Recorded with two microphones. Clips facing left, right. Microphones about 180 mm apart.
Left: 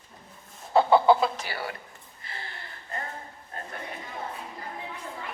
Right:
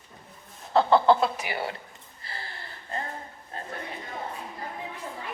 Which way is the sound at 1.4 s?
20° right (ahead or behind).